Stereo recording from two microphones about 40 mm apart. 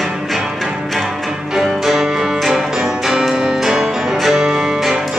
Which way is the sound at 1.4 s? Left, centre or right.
Centre.